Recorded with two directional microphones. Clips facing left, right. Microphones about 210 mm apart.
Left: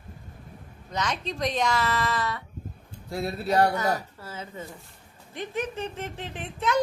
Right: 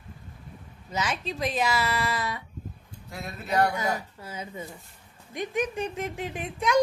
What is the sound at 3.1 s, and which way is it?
Speech, 35° left (ahead or behind).